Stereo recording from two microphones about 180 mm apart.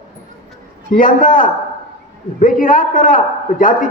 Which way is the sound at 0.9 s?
50° left (ahead or behind).